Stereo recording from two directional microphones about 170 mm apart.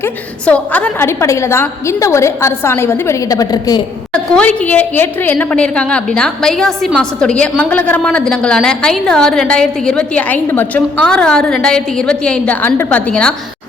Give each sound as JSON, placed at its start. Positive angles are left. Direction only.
{"t": 0.4, "sound": "a woman's voice", "side_deg": 10}
{"t": 4.1, "sound": "a woman's voice", "side_deg": 5}